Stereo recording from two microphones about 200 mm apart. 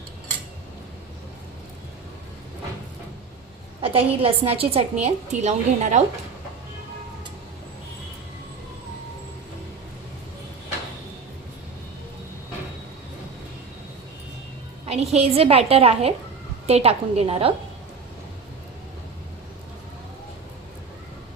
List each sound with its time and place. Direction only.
3.8 s a woman's voice: 25° right (ahead or behind)
14.8 s a woman's voice: 30° right (ahead or behind)